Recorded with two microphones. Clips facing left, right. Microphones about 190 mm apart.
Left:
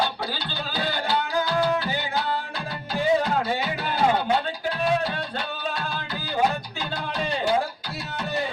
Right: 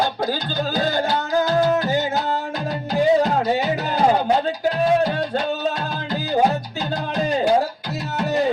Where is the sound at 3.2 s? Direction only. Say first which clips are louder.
Right 6 dB; 40° right (ahead or behind).